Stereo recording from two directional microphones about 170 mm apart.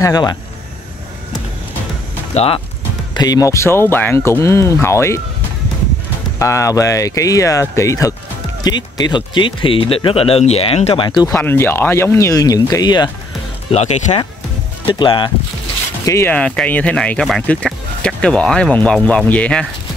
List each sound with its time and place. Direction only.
0.0 s speech: 25° left (ahead or behind)
2.3 s speech: 35° left (ahead or behind)
3.2 s speech: 20° left (ahead or behind)
6.4 s speech: 20° left (ahead or behind)
13.7 s speech: 40° left (ahead or behind)
14.9 s speech: 30° left (ahead or behind)
16.1 s speech: 15° left (ahead or behind)